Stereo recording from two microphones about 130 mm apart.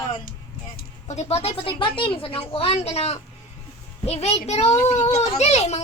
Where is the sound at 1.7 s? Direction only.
40° left (ahead or behind).